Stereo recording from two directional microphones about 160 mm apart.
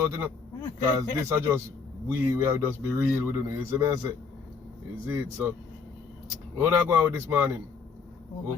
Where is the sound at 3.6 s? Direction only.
15° right (ahead or behind).